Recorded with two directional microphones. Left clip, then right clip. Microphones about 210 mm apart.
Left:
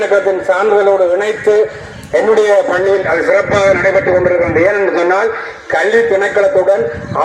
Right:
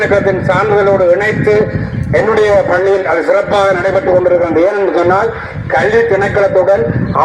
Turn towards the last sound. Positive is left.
turn(degrees=-30)  # may be behind; listen again after turning